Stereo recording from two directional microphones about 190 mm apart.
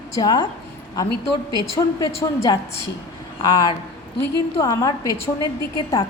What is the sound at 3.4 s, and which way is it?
A woman's voice, 20° left (ahead or behind).